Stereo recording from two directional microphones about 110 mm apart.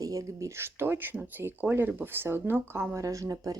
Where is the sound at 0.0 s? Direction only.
30° right (ahead or behind).